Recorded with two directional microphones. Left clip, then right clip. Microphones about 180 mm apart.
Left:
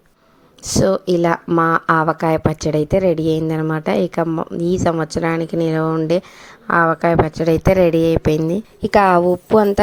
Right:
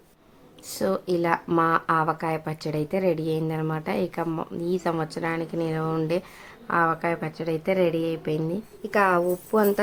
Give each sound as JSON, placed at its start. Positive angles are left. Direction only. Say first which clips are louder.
{"t": 0.8, "sound": "a woman's voice", "louder": "left 9 dB", "side_deg": 35}
{"t": 8.8, "sound": "a woman's voice", "louder": "left 9 dB", "side_deg": 45}